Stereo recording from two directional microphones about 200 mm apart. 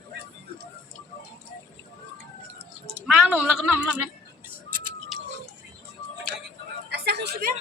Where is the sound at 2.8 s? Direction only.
5° right (ahead or behind).